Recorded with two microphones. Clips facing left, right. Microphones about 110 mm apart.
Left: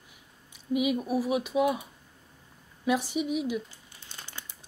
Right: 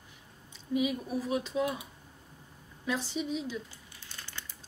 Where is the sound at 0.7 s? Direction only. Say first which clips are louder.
Left 4 dB; 15° left (ahead or behind).